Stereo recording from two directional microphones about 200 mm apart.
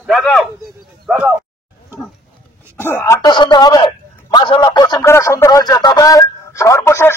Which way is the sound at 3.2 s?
20° left (ahead or behind).